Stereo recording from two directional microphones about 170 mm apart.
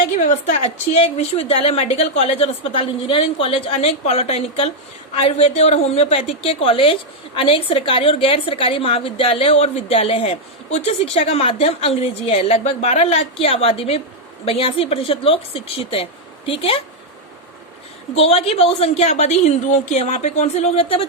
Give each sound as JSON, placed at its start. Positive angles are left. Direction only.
{"t": 0.2, "sound": "a woman's voice", "side_deg": 50}
{"t": 18.2, "sound": "a woman's voice", "side_deg": 35}